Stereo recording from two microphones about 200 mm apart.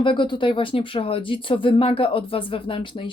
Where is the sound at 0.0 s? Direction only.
25° left (ahead or behind).